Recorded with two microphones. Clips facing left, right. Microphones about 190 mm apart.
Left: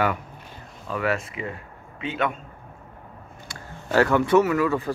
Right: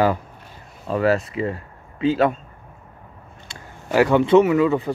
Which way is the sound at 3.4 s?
15° right (ahead or behind).